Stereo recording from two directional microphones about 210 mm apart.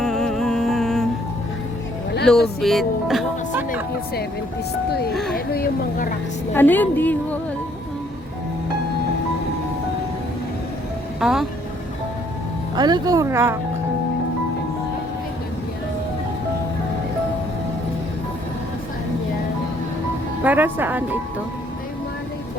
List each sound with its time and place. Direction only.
0.0 s music: 5° left (ahead or behind)
2.6 s speech: centre (ahead or behind)
5.1 s speech: centre (ahead or behind)
5.5 s a woman's voice: 45° left (ahead or behind)
6.5 s a woman's voice: 10° left (ahead or behind)
11.2 s speech: centre (ahead or behind)
12.7 s speech: 20° right (ahead or behind)
20.4 s speech: 10° right (ahead or behind)